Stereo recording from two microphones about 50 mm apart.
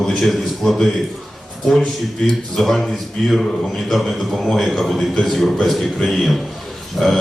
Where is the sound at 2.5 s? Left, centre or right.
Centre.